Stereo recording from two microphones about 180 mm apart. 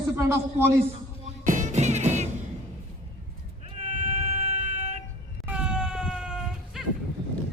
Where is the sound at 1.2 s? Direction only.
45° right (ahead or behind).